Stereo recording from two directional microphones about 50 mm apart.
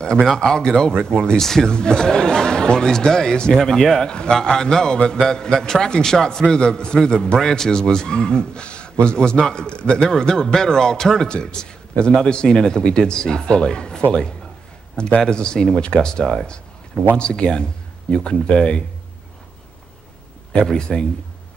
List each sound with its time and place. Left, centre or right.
0.4 s speech: centre
4.1 s a man's voice: centre
20.7 s speech: centre